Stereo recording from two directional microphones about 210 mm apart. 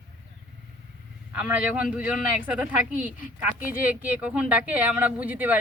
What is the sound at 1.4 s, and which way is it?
Speech, 5° right (ahead or behind).